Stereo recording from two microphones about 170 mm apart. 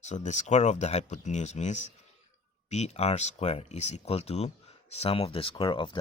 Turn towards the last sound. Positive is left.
turn(degrees=30)  # may be behind; listen again after turning